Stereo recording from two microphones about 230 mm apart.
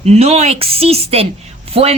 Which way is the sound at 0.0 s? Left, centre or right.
Right.